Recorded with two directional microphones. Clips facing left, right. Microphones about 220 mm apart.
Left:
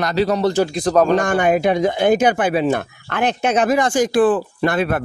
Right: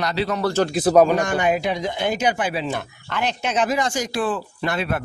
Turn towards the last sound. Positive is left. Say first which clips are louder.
# left 6 dB
turn(degrees=50)  # may be behind; listen again after turning